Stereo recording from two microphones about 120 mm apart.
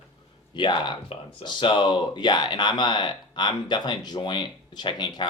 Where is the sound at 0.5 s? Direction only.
40° left (ahead or behind).